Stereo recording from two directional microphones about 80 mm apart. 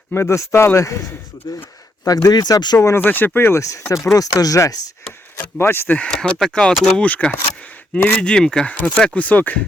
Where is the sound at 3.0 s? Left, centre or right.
Left.